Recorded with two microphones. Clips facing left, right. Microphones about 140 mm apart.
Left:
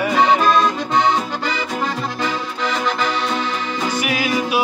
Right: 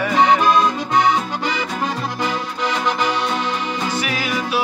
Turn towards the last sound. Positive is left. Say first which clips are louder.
# left 3 dB
turn(degrees=15)  # may be behind; listen again after turning